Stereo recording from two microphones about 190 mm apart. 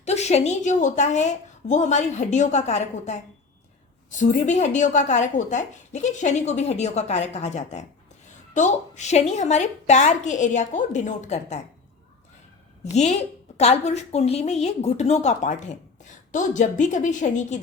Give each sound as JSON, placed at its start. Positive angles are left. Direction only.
{"t": 0.0, "sound": "speech", "side_deg": 35}
{"t": 12.8, "sound": "speech", "side_deg": 35}